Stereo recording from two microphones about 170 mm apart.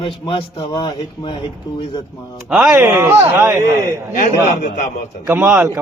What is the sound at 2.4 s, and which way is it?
Speech, 5° right (ahead or behind).